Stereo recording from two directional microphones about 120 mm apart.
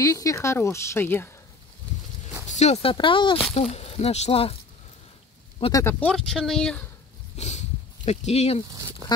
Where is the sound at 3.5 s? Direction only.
60° left (ahead or behind).